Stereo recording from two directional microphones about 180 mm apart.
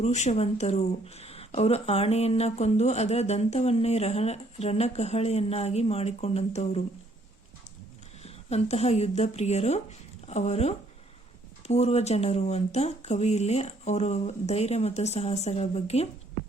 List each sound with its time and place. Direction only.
0.0 s speech: 40° left (ahead or behind)
8.2 s speech: 35° left (ahead or behind)